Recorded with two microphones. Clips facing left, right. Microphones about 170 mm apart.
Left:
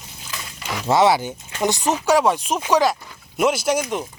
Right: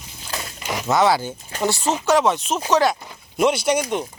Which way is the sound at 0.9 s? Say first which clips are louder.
Left 2 dB; 25° left (ahead or behind).